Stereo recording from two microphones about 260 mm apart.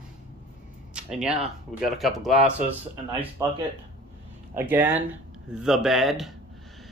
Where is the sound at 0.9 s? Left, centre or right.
Centre.